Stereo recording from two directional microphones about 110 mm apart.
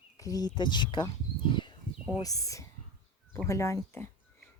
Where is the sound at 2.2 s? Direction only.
30° left (ahead or behind).